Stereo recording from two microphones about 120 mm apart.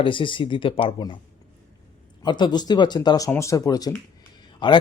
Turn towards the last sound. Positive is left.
turn(degrees=40)  # may be behind; listen again after turning